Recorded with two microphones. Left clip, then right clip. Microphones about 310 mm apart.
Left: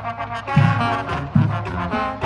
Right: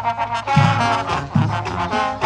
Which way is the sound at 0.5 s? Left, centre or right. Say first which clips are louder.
Right 3 dB; right.